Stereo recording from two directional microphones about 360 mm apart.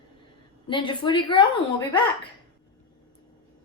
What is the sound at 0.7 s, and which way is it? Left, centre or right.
Speech, centre.